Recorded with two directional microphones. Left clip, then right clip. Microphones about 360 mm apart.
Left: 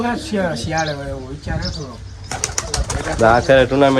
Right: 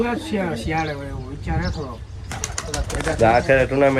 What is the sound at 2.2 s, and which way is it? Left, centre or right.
Bird, centre.